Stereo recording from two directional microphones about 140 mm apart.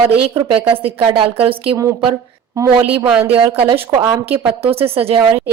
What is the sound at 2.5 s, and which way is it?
Speech, 20° right (ahead or behind).